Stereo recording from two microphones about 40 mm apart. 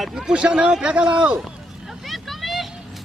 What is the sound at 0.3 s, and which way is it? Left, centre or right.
Speech, right.